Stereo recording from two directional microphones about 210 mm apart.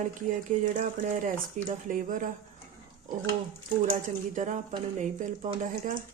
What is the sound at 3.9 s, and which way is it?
Speech, 40° right (ahead or behind).